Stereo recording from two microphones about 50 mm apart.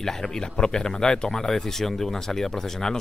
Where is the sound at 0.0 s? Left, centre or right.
Centre.